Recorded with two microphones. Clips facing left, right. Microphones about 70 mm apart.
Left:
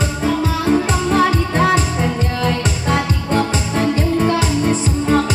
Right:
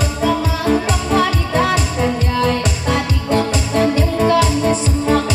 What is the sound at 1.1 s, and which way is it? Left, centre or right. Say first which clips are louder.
Music: even; left.